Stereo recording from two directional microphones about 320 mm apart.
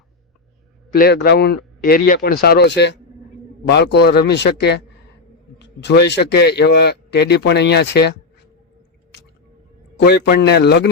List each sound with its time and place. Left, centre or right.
0.9 s speech: left
10.0 s speech: left